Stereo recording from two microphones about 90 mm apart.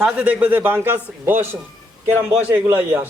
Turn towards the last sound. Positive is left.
turn(degrees=-20)  # may be behind; listen again after turning